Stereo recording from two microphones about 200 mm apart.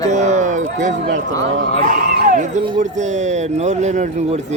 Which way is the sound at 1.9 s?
40° right (ahead or behind).